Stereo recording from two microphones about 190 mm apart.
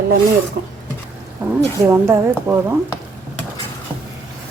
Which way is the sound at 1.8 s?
15° right (ahead or behind).